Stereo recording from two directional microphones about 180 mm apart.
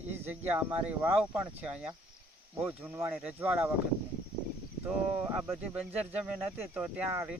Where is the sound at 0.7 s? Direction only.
10° right (ahead or behind).